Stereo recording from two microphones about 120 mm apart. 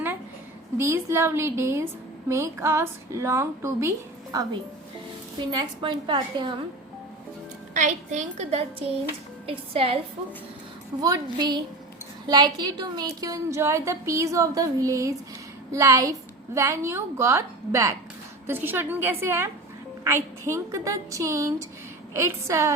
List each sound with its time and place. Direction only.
0.8 s a woman's voice: 20° right (ahead or behind)
5.5 s a woman's voice: 40° right (ahead or behind)
7.7 s a woman's voice: 90° right; by 8.6 s 65° right (ahead or behind)
9.5 s a woman's voice: 50° right (ahead or behind)
11.0 s a woman's voice: 35° right (ahead or behind)